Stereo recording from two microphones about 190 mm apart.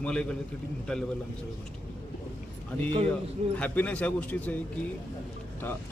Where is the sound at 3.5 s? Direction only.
5° left (ahead or behind).